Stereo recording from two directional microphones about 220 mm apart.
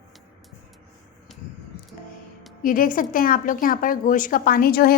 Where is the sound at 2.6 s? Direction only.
40° left (ahead or behind).